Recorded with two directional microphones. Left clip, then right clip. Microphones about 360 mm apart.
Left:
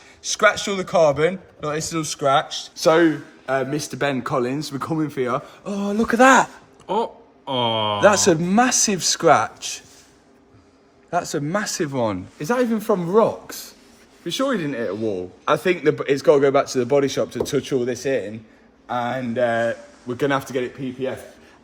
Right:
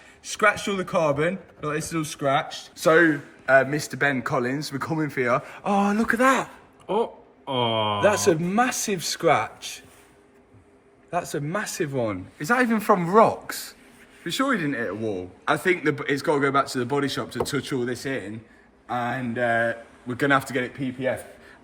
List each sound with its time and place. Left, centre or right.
0.3 s a man's voice: centre
6.1 s speech: left
6.8 s speech: centre
8.0 s speech: left
11.1 s speech: left
12.4 s a man's voice: centre